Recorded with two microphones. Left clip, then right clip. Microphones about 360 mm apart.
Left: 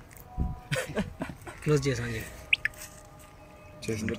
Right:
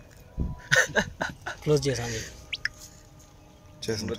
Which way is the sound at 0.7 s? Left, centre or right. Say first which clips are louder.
Right 11 dB; right.